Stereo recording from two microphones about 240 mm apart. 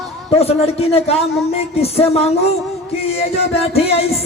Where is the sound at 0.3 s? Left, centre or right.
Left.